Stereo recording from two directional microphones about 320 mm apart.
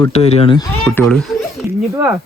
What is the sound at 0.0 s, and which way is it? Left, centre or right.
Speech, centre.